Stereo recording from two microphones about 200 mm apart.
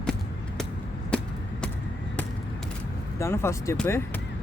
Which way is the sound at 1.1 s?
5° left (ahead or behind).